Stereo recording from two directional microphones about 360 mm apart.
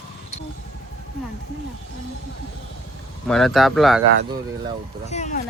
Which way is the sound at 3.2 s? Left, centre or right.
Centre.